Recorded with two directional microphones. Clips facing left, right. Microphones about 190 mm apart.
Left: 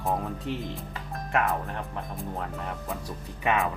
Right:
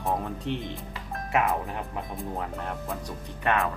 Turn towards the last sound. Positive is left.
turn(degrees=5)  # may be behind; listen again after turning